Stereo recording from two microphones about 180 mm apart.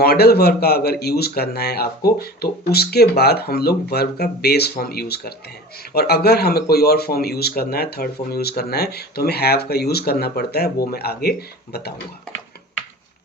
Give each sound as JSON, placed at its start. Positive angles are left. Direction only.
{"t": 0.0, "sound": "a man's voice", "side_deg": 60}